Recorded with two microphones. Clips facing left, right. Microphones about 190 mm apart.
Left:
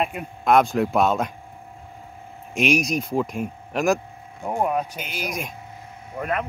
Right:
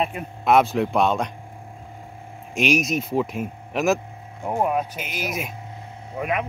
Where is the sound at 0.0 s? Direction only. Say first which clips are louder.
Even; centre (ahead or behind).